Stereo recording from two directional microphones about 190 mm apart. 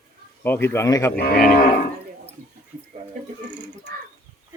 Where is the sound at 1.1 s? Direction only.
55° left (ahead or behind).